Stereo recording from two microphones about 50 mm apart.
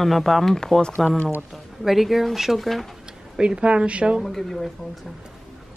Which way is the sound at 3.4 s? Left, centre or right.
Centre.